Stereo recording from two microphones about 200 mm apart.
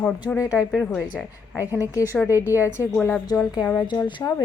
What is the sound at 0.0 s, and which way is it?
Speech, 10° left (ahead or behind).